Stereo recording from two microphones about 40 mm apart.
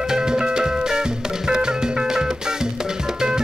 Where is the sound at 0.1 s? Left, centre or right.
Centre.